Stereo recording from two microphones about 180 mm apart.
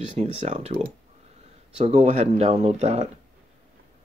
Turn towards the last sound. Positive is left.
turn(degrees=-35)  # may be behind; listen again after turning